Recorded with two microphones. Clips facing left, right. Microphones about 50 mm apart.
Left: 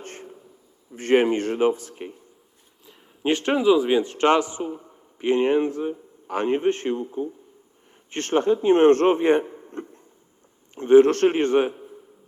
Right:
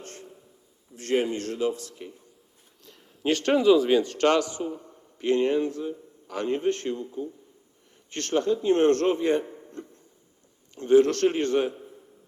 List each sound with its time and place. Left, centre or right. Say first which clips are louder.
0.0 s a sound: left 4 dB; left
1.1 s speech: left 7 dB; left
1.7 s a man's voice: left 4 dB; left
2.8 s a man's voice: left 2 dB; centre
9.6 s a sound: left 5 dB; left
10.8 s a man's voice: left 5 dB; left